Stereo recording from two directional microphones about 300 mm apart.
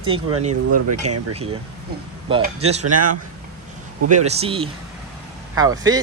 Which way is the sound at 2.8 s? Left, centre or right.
Right.